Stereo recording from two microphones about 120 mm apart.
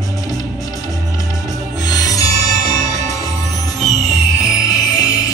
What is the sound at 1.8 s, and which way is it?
Music, 30° left (ahead or behind).